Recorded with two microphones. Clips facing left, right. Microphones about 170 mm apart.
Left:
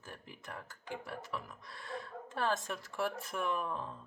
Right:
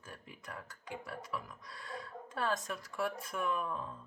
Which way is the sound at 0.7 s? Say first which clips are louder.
Left 2 dB; 25° left (ahead or behind).